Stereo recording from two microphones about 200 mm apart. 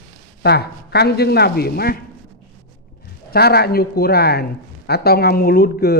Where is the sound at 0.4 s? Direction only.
55° left (ahead or behind).